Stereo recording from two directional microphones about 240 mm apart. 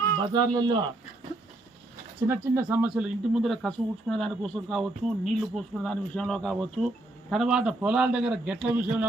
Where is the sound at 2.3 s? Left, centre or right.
Centre.